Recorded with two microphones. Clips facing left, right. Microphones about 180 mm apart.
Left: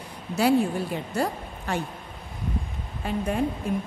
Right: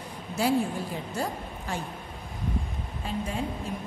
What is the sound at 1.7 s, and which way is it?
Speech, 65° left (ahead or behind).